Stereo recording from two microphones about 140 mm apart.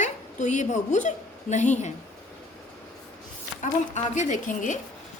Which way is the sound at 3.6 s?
60° left (ahead or behind).